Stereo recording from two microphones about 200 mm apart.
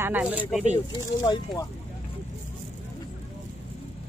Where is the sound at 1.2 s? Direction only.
20° left (ahead or behind).